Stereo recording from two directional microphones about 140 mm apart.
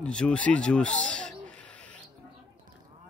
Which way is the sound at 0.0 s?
5° left (ahead or behind).